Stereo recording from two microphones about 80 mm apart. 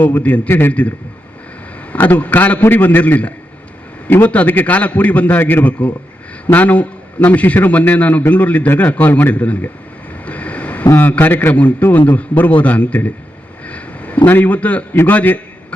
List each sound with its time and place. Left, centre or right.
0.0 s a man's voice: left
10.2 s a sound: centre
10.9 s a man's voice: left
13.7 s vehicle: centre
14.3 s a man's voice: left